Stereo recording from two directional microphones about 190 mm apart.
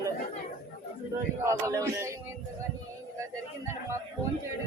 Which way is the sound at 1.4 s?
15° right (ahead or behind).